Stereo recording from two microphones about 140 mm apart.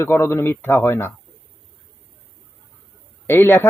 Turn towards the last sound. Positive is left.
turn(degrees=15)  # may be behind; listen again after turning